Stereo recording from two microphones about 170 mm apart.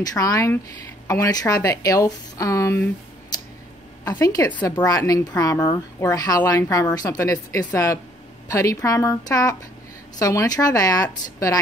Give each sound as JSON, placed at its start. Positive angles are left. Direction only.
{"t": 0.0, "sound": "speech", "side_deg": 20}